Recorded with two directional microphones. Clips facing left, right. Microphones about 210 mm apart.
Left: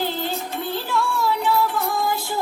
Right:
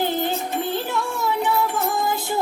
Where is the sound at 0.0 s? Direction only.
20° right (ahead or behind).